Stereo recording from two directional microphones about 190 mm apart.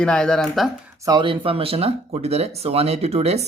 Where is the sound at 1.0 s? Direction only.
20° right (ahead or behind).